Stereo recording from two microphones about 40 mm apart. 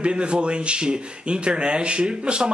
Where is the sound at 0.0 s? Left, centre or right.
Right.